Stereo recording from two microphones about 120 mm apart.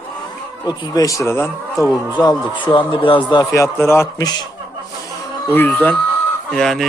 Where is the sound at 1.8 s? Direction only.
30° left (ahead or behind).